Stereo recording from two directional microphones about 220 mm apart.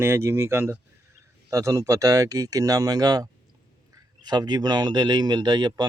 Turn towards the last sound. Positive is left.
turn(degrees=-20)  # may be behind; listen again after turning